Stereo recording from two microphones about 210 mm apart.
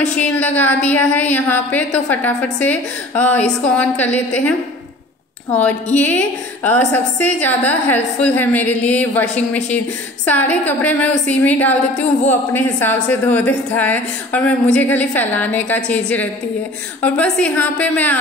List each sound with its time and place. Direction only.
0.0 s a woman's voice: 5° left (ahead or behind)
5.9 s a woman's voice: 10° left (ahead or behind)